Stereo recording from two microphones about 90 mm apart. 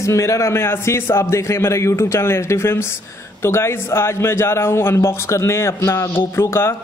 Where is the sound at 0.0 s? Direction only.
35° left (ahead or behind).